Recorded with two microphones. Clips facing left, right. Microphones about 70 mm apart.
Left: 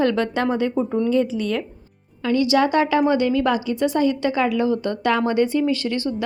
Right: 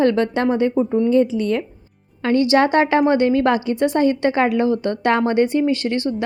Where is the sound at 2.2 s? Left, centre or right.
Right.